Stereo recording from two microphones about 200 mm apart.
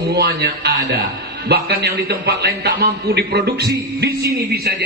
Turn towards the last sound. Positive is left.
turn(degrees=-50)  # may be behind; listen again after turning